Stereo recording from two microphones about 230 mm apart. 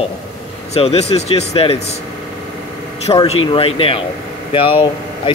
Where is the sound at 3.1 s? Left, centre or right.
Left.